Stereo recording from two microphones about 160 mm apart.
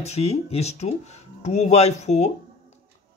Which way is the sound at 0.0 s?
40° left (ahead or behind).